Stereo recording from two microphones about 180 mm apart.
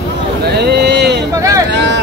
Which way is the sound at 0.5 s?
65° right (ahead or behind).